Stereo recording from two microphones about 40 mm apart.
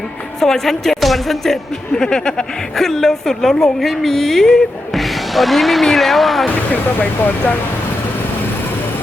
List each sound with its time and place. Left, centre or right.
0.3 s speech: centre
2.0 s a woman's voice: centre